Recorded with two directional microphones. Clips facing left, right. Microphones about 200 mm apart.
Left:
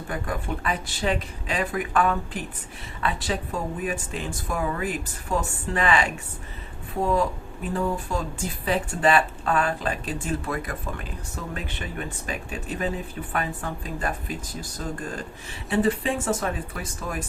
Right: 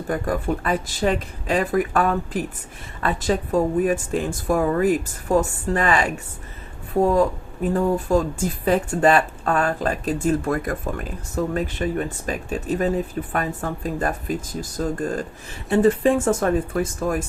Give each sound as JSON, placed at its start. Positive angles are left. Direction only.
{"t": 0.1, "sound": "speech", "side_deg": -40}
{"t": 7.7, "sound": "speech", "side_deg": -40}